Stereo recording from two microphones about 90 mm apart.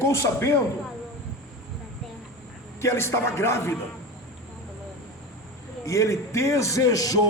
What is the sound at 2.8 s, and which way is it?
Speech, 30° left (ahead or behind).